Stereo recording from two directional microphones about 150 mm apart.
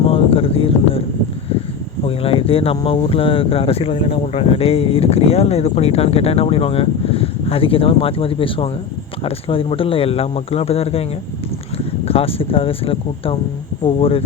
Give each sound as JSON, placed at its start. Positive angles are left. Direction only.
{"t": 0.1, "sound": "a sound", "side_deg": 40}
{"t": 2.0, "sound": "speech", "side_deg": 40}
{"t": 12.0, "sound": "speech", "side_deg": 40}